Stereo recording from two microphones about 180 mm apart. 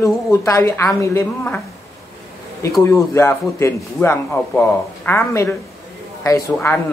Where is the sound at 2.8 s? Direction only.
15° left (ahead or behind).